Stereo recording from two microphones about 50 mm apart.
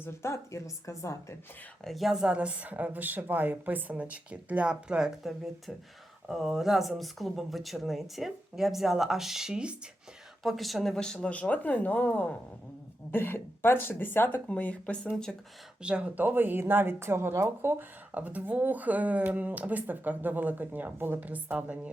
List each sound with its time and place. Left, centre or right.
0.0 s a woman's voice: left
1.8 s speech: centre
2.2 s speech: right
6.2 s speech: centre
10.4 s speech: centre
10.9 s speech: centre
11.3 s speech: left
13.1 s speech: left
15.1 s speech: centre
15.8 s speech: right
16.1 s speech: right
17.0 s speech: right
17.3 s speech: right
18.1 s speech: right